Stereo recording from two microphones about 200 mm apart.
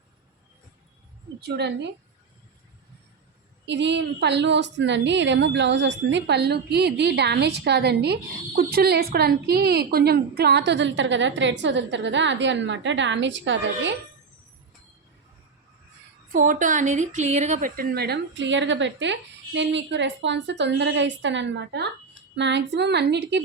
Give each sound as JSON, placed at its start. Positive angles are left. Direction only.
{"t": 1.4, "sound": "a woman's voice", "side_deg": -55}
{"t": 3.7, "sound": "a woman's voice", "side_deg": -60}
{"t": 16.3, "sound": "a woman's voice", "side_deg": -40}